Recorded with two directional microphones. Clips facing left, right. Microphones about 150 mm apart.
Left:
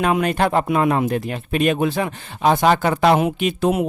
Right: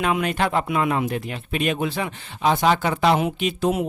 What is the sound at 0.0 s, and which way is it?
Speech, 45° left (ahead or behind).